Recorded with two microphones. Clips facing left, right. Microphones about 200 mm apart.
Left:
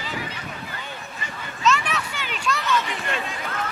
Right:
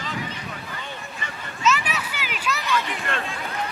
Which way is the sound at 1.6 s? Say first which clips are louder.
Left 1 dB; 5° right (ahead or behind).